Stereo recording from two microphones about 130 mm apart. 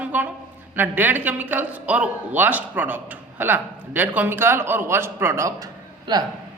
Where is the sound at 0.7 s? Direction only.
15° right (ahead or behind); by 6.2 s 35° right (ahead or behind).